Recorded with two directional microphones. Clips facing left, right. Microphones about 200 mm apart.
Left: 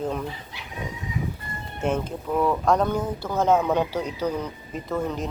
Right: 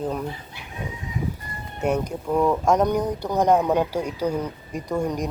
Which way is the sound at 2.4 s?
20° right (ahead or behind).